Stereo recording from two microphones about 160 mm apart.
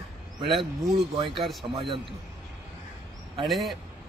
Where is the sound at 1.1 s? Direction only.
35° right (ahead or behind).